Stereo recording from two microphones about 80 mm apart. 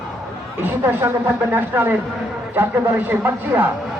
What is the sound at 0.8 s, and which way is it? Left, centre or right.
Speech, right.